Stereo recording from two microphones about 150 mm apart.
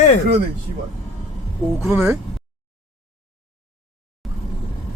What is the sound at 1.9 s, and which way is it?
Speech, 15° right (ahead or behind).